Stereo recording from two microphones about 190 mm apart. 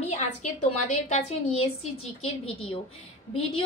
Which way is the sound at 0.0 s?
35° left (ahead or behind).